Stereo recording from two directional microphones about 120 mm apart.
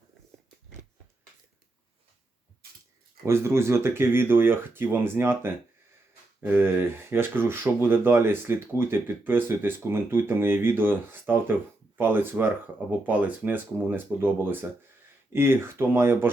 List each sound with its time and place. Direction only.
3.2 s speech: 20° right (ahead or behind)